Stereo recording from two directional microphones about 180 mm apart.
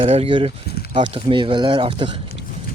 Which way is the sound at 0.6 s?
60° left (ahead or behind).